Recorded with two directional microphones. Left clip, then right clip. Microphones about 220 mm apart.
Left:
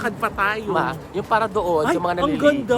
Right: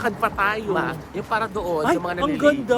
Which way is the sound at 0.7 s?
15° left (ahead or behind).